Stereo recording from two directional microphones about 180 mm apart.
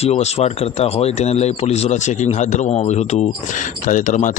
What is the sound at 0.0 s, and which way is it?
A man's voice, 35° left (ahead or behind).